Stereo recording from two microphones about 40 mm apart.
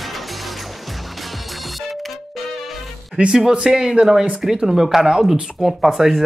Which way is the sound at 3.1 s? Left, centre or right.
Centre.